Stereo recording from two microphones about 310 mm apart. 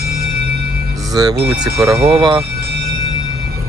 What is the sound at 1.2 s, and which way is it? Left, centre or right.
Speech, centre.